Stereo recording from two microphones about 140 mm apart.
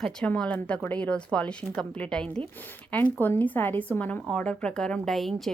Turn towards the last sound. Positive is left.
turn(degrees=0)  # may be behind; listen again after turning